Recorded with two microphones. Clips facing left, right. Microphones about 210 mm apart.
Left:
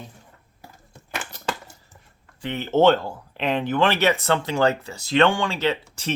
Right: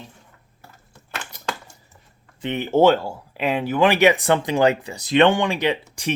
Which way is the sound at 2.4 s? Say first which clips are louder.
Right 2 dB; 15° right (ahead or behind).